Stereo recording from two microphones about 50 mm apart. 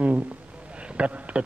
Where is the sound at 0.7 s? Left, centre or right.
Right.